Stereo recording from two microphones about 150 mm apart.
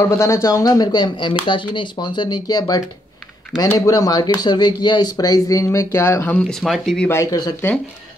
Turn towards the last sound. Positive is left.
turn(degrees=15)  # may be behind; listen again after turning